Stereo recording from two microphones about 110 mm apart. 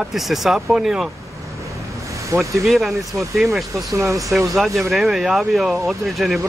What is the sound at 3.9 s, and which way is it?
Speech, 30° right (ahead or behind).